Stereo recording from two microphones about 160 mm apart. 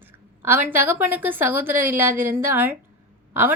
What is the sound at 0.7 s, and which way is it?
A woman's voice, 15° right (ahead or behind).